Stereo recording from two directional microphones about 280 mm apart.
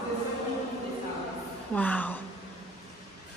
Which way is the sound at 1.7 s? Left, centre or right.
Centre.